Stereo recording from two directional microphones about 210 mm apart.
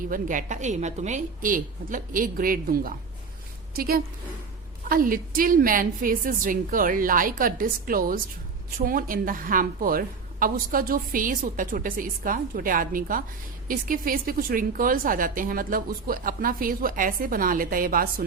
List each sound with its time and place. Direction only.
0.1 s a woman's voice: 40° right (ahead or behind)